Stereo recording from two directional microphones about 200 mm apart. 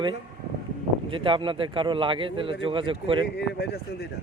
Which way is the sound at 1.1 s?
25° right (ahead or behind).